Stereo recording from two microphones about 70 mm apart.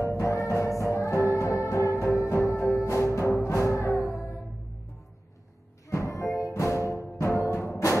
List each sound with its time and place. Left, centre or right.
0.0 s music: left
5.9 s music: left
7.2 s timpani: left